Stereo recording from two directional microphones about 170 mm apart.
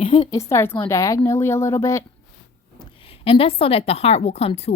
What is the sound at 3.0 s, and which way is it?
A woman's voice, 35° left (ahead or behind).